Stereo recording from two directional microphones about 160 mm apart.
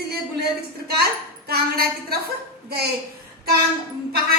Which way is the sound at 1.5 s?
70° right (ahead or behind).